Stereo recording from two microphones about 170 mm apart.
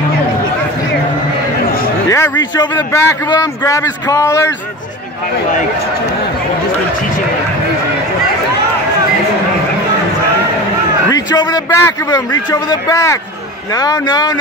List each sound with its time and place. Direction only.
2.0 s a sound: 15° left (ahead or behind)
2.7 s a man's voice: 15° left (ahead or behind)
11.1 s a man's voice: 20° left (ahead or behind)